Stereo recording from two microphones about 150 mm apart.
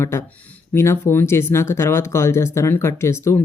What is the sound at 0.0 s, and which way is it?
Speech, 15° left (ahead or behind).